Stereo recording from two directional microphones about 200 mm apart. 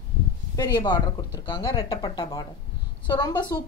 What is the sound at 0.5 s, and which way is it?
A woman's voice, 20° left (ahead or behind).